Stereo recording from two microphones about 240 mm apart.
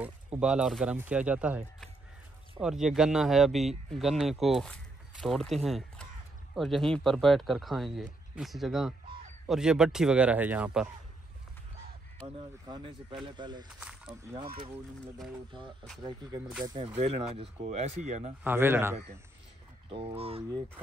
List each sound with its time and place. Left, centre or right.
0.0 s speech: centre
2.6 s speech: centre
12.6 s speech: centre
13.7 s a sound: centre
16.0 s speech: centre
18.4 s speech: centre
19.9 s speech: right